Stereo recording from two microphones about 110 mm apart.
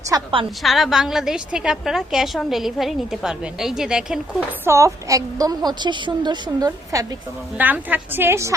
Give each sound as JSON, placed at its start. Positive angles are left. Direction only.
{"t": 0.1, "sound": "a woman's voice", "side_deg": -30}
{"t": 0.6, "sound": "a woman's voice", "side_deg": 0}
{"t": 4.6, "sound": "a woman's voice", "side_deg": -25}
{"t": 6.9, "sound": "a woman's voice", "side_deg": -30}
{"t": 7.6, "sound": "a woman's voice", "side_deg": -15}